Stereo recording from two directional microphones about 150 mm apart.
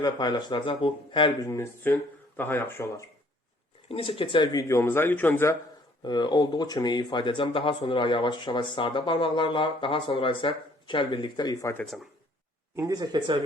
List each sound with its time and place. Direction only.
0.0 s speech: 30° left (ahead or behind)
1.5 s speech: 15° left (ahead or behind)
3.8 s speech: 40° left (ahead or behind)
4.7 s speech: 15° left (ahead or behind)
6.0 s speech: 30° left (ahead or behind)
12.7 s speech: 25° right (ahead or behind)